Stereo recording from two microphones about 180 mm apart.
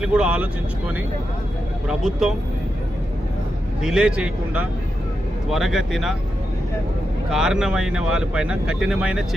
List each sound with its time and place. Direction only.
0.0 s speech: 5° right (ahead or behind)
1.9 s speech: 5° right (ahead or behind)
3.8 s speech: 5° right (ahead or behind)
7.3 s speech: 5° right (ahead or behind)